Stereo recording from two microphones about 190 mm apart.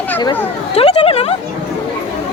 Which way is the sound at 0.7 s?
30° left (ahead or behind).